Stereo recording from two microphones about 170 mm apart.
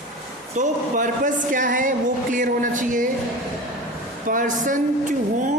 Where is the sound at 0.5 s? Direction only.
50° right (ahead or behind).